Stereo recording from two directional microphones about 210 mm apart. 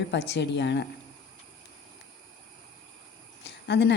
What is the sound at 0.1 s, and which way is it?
Speech, 55° left (ahead or behind).